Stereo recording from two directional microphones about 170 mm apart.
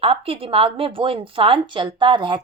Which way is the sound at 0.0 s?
35° right (ahead or behind).